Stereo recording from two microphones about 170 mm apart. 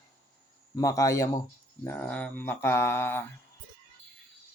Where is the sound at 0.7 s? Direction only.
20° left (ahead or behind).